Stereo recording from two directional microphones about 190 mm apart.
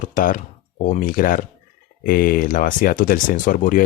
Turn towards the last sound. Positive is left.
turn(degrees=45)  # may be behind; listen again after turning